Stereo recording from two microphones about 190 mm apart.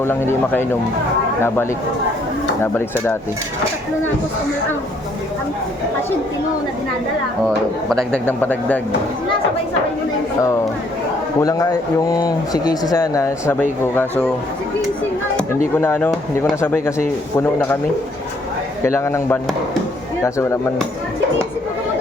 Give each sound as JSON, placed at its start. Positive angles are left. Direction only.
{"t": 0.0, "sound": "speech", "side_deg": 15}
{"t": 7.9, "sound": "speech", "side_deg": 5}
{"t": 11.3, "sound": "speech", "side_deg": 20}
{"t": 15.7, "sound": "speech", "side_deg": 10}
{"t": 18.8, "sound": "speech", "side_deg": 15}